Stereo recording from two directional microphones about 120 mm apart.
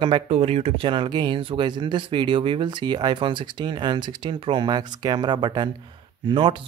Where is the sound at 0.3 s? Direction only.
60° right (ahead or behind).